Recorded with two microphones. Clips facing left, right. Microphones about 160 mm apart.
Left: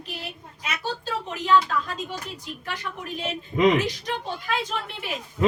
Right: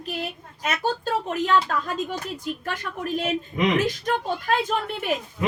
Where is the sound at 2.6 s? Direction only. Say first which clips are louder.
Right 1 dB; 50° right (ahead or behind).